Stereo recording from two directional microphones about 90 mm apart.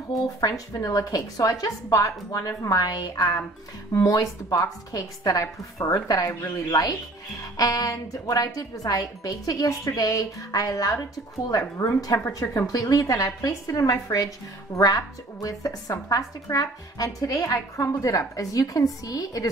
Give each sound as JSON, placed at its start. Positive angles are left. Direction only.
{"t": 0.1, "sound": "a woman's voice", "side_deg": 40}